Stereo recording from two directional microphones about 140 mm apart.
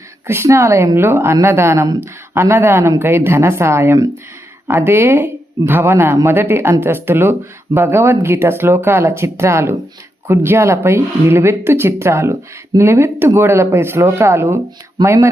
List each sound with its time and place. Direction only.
0.3 s speech: 20° right (ahead or behind)